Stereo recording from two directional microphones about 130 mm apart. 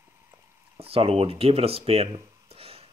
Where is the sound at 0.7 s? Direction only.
50° right (ahead or behind).